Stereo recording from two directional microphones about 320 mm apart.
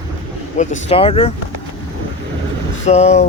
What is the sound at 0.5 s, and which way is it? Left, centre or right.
Speech, left.